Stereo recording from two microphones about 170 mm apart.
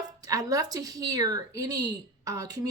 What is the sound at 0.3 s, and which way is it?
Speech, 20° right (ahead or behind).